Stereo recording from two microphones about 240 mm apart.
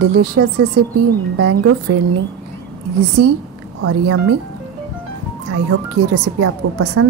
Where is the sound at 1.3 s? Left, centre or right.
Right.